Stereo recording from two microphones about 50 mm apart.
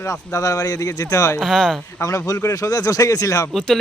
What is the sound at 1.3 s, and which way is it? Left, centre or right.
Speech, centre.